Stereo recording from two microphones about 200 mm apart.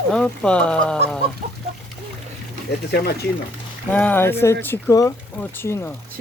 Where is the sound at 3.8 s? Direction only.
10° left (ahead or behind).